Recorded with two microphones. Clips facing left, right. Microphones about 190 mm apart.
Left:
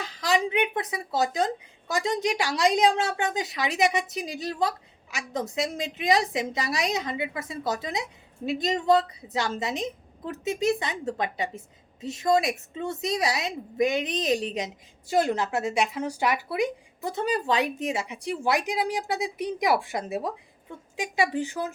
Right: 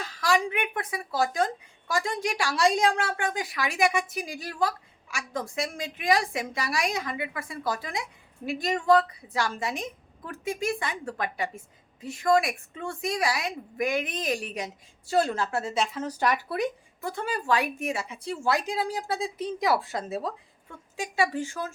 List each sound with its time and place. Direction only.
0.0 s a woman's voice: 20° left (ahead or behind)